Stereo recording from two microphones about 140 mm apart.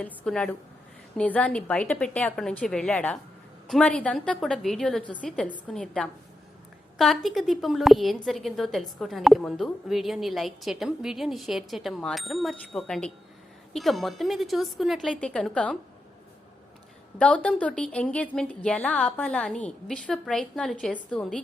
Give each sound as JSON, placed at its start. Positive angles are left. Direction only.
{"t": 0.0, "sound": "a woman's voice", "side_deg": 5}
{"t": 17.2, "sound": "a woman's voice", "side_deg": 5}